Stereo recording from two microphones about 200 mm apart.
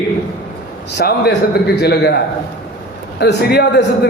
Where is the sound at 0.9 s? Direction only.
55° left (ahead or behind).